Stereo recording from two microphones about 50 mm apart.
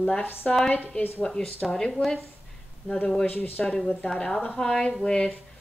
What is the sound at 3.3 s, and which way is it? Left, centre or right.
Speech, left.